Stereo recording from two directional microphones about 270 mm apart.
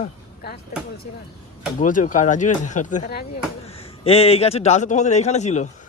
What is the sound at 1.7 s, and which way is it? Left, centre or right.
A man's voice, left.